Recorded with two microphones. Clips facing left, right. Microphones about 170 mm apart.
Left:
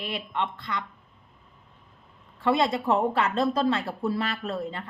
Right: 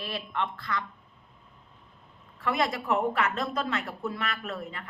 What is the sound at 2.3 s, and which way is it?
Speech, 30° left (ahead or behind).